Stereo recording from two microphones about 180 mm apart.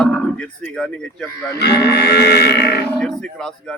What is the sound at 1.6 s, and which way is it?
Livestock, 65° left (ahead or behind).